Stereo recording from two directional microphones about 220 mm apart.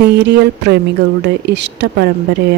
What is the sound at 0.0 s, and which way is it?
Speech, 50° right (ahead or behind).